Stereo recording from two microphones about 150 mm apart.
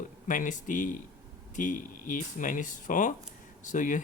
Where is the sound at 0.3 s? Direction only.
60° left (ahead or behind).